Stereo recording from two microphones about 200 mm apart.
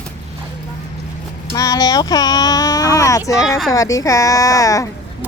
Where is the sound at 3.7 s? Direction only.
15° left (ahead or behind).